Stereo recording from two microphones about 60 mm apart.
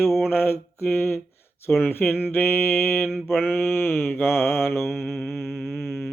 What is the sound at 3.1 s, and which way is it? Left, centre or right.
Mantra, centre.